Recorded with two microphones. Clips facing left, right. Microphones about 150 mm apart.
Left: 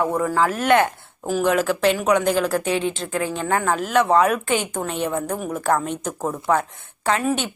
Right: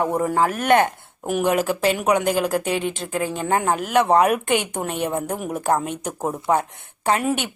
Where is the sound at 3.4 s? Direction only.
25° right (ahead or behind).